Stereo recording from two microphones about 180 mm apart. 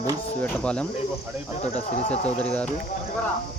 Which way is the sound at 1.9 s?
40° left (ahead or behind).